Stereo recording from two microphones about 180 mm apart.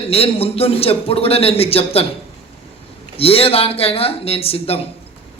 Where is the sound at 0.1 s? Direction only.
35° left (ahead or behind).